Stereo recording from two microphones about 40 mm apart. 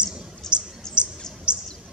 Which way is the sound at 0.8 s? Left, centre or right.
Centre.